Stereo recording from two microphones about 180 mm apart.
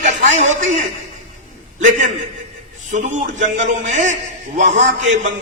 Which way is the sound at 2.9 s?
40° right (ahead or behind).